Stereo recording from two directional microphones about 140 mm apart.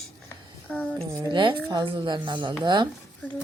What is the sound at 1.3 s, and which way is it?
Speech, 35° right (ahead or behind).